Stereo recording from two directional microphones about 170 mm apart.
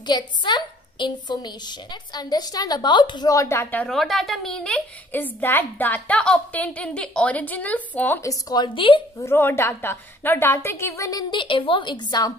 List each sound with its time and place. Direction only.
0.0 s a woman's voice: 25° left (ahead or behind)
3.8 s a woman's voice: centre (ahead or behind); by 9.0 s 30° left (ahead or behind)
9.2 s a woman's voice: 15° left (ahead or behind)